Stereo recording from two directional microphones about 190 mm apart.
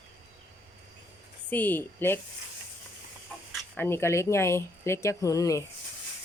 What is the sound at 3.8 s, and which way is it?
Speech, 10° left (ahead or behind).